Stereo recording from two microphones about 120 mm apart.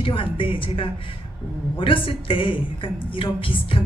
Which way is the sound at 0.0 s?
45° left (ahead or behind).